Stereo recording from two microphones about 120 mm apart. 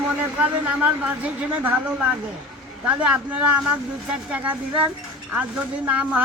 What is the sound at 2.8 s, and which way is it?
Speech, 10° right (ahead or behind).